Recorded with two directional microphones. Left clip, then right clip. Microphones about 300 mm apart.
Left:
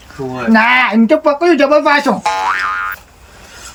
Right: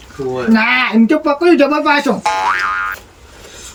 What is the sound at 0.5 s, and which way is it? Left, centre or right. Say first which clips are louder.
Speech: left 3 dB; centre.